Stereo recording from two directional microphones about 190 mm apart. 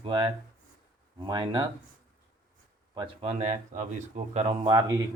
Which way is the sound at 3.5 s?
40° right (ahead or behind).